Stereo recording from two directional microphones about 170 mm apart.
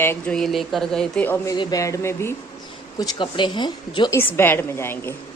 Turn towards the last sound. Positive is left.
turn(degrees=15)  # may be behind; listen again after turning